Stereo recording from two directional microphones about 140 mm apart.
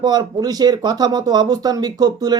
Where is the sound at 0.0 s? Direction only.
30° right (ahead or behind).